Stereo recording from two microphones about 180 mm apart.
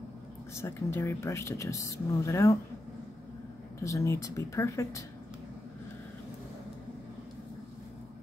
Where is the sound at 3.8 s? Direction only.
15° left (ahead or behind).